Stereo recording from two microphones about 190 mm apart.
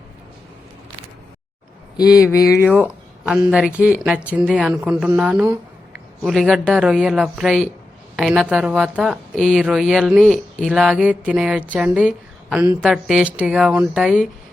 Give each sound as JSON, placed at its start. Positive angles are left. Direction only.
{"t": 2.3, "sound": "speech", "side_deg": 15}
{"t": 2.6, "sound": "speech", "side_deg": -5}